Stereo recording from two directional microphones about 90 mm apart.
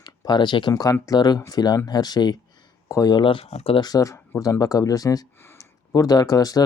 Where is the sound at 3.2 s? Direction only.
75° left (ahead or behind).